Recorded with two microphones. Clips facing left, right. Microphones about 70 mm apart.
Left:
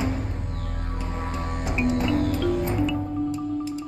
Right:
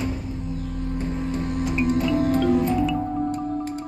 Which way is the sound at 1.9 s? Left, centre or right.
Left.